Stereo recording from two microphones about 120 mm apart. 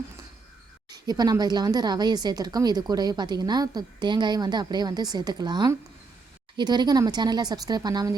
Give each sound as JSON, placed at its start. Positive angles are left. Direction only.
{"t": 0.9, "sound": "speech", "side_deg": -35}